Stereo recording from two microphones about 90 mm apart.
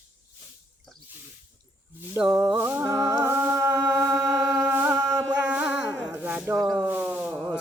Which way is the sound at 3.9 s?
35° right (ahead or behind).